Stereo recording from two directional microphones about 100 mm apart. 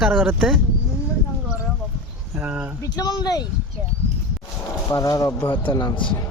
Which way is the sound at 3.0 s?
40° left (ahead or behind).